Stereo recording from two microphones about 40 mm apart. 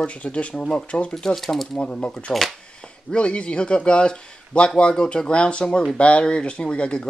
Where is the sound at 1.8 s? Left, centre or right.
Left.